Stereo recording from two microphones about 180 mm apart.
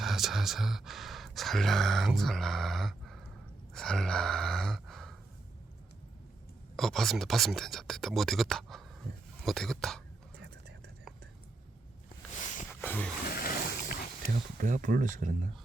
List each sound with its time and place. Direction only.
0.0 s speech: centre (ahead or behind)
3.8 s gasp: 5° left (ahead or behind)
6.7 s speech: centre (ahead or behind)
9.4 s whispering: centre (ahead or behind)
12.8 s a sound: 10° left (ahead or behind)
13.2 s a sound: 55° left (ahead or behind)
14.6 s speech: 50° right (ahead or behind)